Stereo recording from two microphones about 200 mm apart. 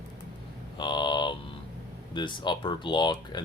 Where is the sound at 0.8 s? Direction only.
20° left (ahead or behind).